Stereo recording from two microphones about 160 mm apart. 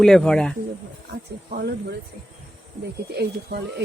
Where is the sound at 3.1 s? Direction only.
85° right.